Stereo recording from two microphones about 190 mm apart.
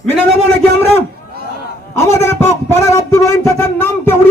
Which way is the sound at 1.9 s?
15° left (ahead or behind).